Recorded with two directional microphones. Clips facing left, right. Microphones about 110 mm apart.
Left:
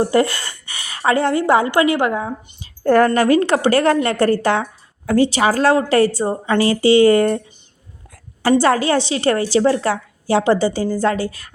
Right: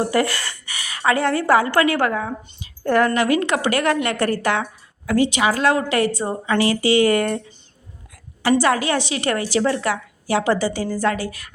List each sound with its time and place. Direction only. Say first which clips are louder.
0.0 s a woman's voice: left 4 dB; 25° left (ahead or behind)
2.6 s a woman's voice: left 5 dB; 40° left (ahead or behind)